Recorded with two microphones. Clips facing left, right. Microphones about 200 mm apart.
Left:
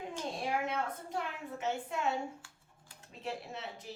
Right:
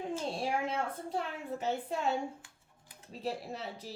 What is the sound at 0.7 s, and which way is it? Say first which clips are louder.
A woman's voice: right 2 dB; 35° right (ahead or behind).